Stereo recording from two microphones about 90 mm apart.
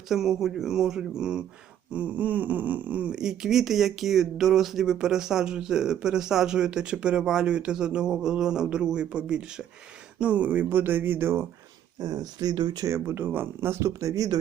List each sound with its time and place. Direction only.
0.1 s speech: 5° right (ahead or behind); by 11.4 s 25° right (ahead or behind)
11.9 s speech: 45° right (ahead or behind)
12.8 s speech: 30° right (ahead or behind)